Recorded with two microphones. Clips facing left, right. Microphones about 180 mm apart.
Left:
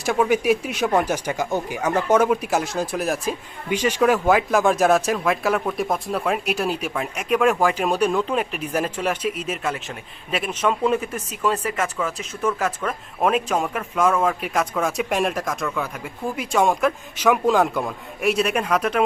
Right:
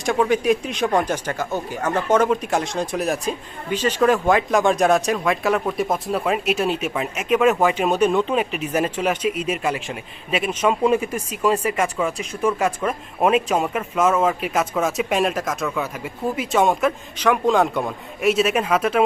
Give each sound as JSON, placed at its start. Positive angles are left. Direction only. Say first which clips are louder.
{"t": 0.0, "sound": "speech", "louder": "right 1 dB", "side_deg": 5}
{"t": 3.7, "sound": "speech", "louder": "right 1 dB", "side_deg": 10}